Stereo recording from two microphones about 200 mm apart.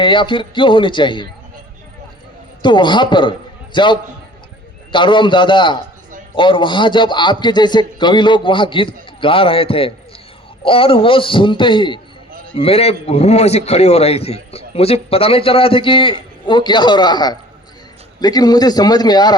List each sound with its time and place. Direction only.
0.0 s a man's voice: 25° left (ahead or behind)
2.6 s a man's voice: 25° left (ahead or behind)